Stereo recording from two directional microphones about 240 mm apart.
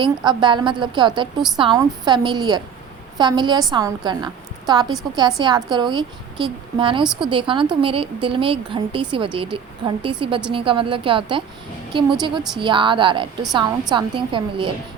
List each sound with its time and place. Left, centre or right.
0.0 s a woman's voice: centre